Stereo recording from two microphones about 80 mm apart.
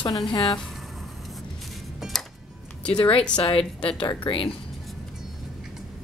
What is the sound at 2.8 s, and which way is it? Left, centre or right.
Speech, centre.